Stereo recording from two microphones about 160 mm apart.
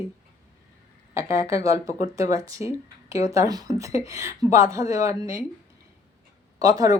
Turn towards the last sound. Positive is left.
turn(degrees=-20)  # may be behind; listen again after turning